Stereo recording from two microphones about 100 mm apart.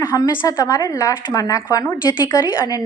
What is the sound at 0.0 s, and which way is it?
A woman's voice, 35° left (ahead or behind).